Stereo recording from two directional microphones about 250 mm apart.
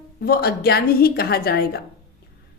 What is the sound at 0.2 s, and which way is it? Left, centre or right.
A woman's voice, left.